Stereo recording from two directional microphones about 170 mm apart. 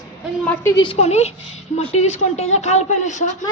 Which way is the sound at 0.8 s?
40° left (ahead or behind).